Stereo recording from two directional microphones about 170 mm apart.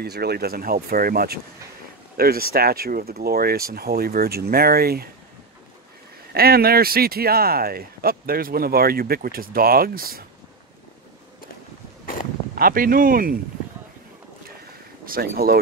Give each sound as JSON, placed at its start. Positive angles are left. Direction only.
{"t": 0.0, "sound": "speech", "side_deg": -70}
{"t": 6.3, "sound": "speech", "side_deg": -65}
{"t": 12.5, "sound": "speech", "side_deg": -55}
{"t": 15.0, "sound": "speech", "side_deg": -60}